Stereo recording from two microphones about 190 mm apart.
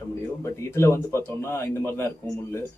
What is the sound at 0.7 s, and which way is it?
A man's voice, 15° left (ahead or behind).